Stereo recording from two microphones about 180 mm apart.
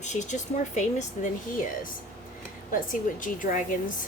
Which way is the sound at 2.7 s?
50° left (ahead or behind).